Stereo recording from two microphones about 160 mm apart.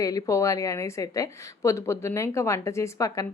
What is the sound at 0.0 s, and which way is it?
A woman's voice, 20° left (ahead or behind).